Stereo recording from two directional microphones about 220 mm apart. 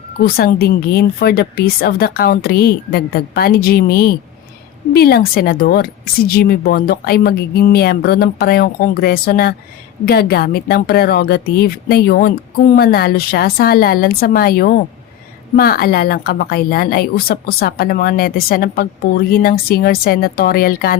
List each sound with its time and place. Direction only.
0.2 s a woman's voice: 45° left (ahead or behind)